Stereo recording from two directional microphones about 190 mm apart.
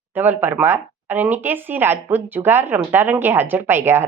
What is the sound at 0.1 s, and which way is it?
Speech, 10° right (ahead or behind).